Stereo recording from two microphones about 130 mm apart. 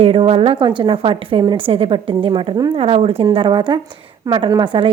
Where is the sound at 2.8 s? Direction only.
50° right (ahead or behind).